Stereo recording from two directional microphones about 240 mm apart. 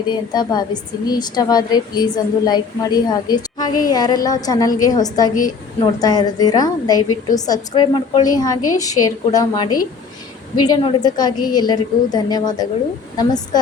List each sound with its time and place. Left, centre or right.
0.1 s a woman's voice: centre